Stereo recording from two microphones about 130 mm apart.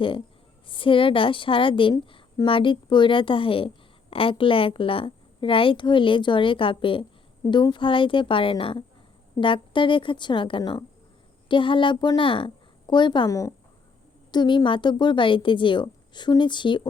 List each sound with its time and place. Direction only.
0.7 s a woman's voice: 40° left (ahead or behind)
10.6 s speech: 30° left (ahead or behind)
11.4 s a woman's voice: 40° left (ahead or behind)